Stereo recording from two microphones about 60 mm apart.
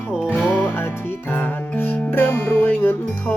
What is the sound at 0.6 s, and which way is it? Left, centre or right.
Music, left.